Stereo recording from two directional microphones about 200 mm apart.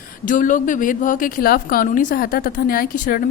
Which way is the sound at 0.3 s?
40° left (ahead or behind).